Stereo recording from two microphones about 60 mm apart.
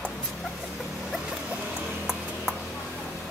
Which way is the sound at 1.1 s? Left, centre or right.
Centre.